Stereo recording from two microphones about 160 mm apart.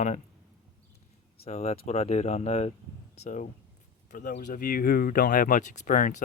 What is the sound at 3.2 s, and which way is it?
Speech, 50° left (ahead or behind).